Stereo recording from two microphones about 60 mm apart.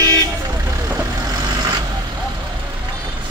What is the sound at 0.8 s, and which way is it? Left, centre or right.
Vehicle, right.